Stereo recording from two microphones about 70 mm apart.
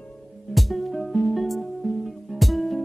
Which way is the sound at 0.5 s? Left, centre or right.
Centre.